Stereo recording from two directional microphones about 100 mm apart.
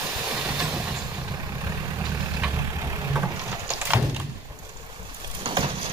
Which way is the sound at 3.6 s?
15° right (ahead or behind).